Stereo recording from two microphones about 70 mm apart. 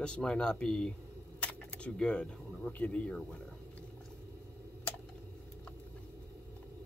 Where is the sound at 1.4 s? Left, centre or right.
Centre.